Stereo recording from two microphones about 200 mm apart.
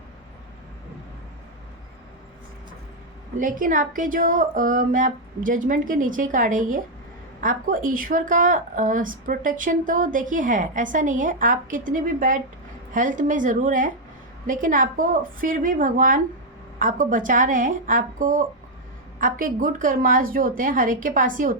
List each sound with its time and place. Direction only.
3.3 s a woman's voice: 40° right (ahead or behind)